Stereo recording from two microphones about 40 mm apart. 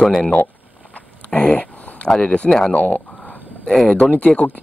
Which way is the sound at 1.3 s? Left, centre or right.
Left.